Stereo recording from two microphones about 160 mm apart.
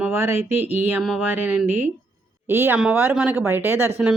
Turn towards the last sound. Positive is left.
turn(degrees=-15)  # may be behind; listen again after turning